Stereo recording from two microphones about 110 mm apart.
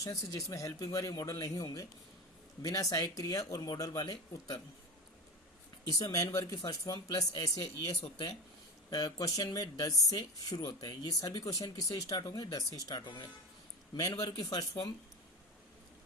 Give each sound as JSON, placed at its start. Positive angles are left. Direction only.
{"t": 0.0, "sound": "speech", "side_deg": 30}
{"t": 5.9, "sound": "speech", "side_deg": 30}